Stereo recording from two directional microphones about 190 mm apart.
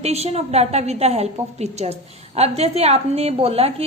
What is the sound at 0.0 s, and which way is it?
A woman's voice, 35° right (ahead or behind).